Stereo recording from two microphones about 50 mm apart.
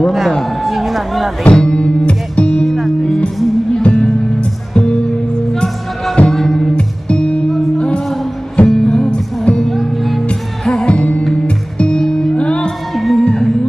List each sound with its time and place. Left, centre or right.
0.0 s a man's voice: centre
1.4 s music: centre
2.6 s music: centre
3.8 s music: centre
5.5 s music: centre
8.6 s music: centre
9.6 s music: centre
10.7 s music: centre
12.0 s music: centre
12.4 s music: centre
12.9 s music: centre
13.2 s music: centre